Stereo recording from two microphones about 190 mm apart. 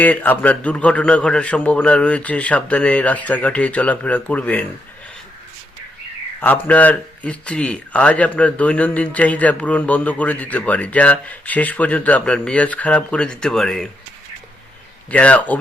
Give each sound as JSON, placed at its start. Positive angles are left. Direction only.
{"t": 0.0, "sound": "speech", "side_deg": 10}
{"t": 6.4, "sound": "speech", "side_deg": 10}
{"t": 15.1, "sound": "speech", "side_deg": 5}